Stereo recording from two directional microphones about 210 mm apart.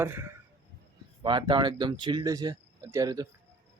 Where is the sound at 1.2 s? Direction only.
20° right (ahead or behind).